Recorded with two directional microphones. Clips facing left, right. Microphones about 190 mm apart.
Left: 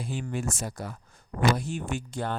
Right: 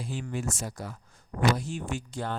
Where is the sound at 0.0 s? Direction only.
55° left (ahead or behind).